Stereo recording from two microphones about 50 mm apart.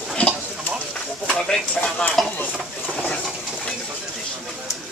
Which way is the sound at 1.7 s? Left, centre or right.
Left.